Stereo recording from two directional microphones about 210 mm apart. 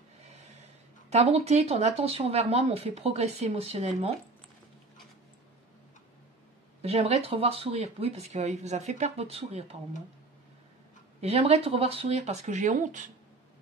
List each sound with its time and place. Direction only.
1.1 s speech: 30° right (ahead or behind)
6.8 s speech: 30° right (ahead or behind)
11.1 s speech: 30° right (ahead or behind)